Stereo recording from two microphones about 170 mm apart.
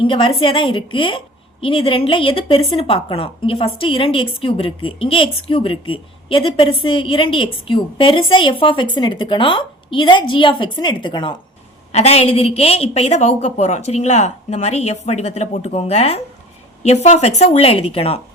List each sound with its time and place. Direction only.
0.0 s a woman's voice: 30° left (ahead or behind)